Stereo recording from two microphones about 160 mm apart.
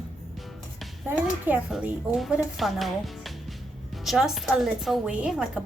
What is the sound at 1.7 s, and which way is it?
A woman's voice, 5° right (ahead or behind).